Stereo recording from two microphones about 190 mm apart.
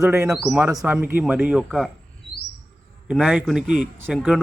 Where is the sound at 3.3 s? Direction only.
5° right (ahead or behind).